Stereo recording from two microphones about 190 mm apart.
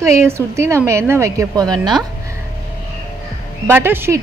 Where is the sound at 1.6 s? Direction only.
5° left (ahead or behind).